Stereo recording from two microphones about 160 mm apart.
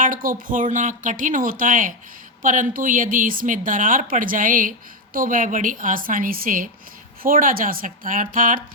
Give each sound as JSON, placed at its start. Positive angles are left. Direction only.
{"t": 0.0, "sound": "a woman's voice", "side_deg": -60}